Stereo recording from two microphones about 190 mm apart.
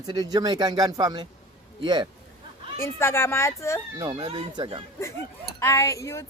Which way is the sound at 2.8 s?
15° left (ahead or behind).